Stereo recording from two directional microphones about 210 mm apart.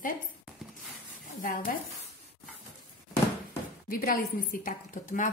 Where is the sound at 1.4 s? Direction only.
40° left (ahead or behind).